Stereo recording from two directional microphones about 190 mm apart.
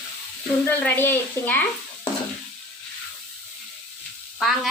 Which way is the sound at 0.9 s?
10° left (ahead or behind).